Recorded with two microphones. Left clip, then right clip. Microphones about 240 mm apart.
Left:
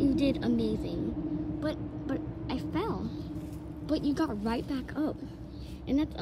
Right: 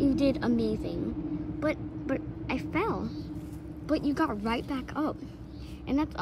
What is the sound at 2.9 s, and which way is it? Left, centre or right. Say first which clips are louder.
Speech: right 3 dB; centre.